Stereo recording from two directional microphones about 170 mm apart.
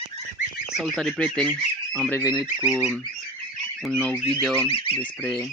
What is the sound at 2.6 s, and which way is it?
Fowl, 5° right (ahead or behind).